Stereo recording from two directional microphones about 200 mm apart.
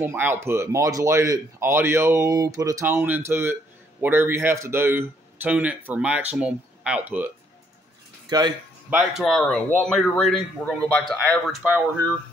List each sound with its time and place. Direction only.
0.0 s speech: 10° right (ahead or behind)
8.3 s speech: 20° right (ahead or behind)
8.9 s speech: centre (ahead or behind)